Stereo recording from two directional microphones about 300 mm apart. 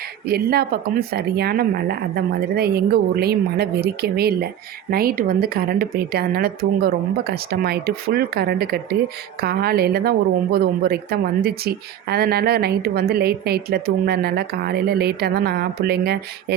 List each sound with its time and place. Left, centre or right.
0.3 s a woman's voice: right